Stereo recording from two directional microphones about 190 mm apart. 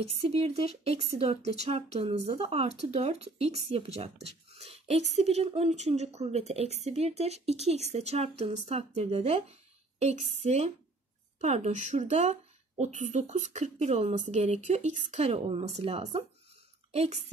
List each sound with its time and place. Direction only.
0.2 s speech: 30° right (ahead or behind)